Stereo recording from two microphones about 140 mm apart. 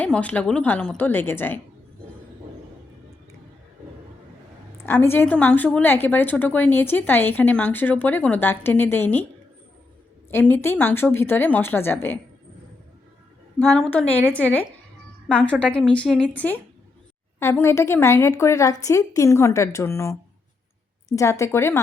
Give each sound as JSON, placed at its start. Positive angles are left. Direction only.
{"t": 0.0, "sound": "a woman's voice", "side_deg": 10}
{"t": 4.8, "sound": "a woman's voice", "side_deg": 15}
{"t": 10.3, "sound": "a woman's voice", "side_deg": 15}
{"t": 13.6, "sound": "a woman's voice", "side_deg": 10}